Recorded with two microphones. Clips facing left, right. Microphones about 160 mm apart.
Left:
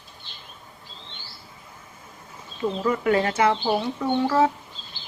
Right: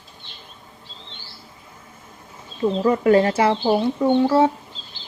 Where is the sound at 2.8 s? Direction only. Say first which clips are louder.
Right 6 dB; 35° right (ahead or behind).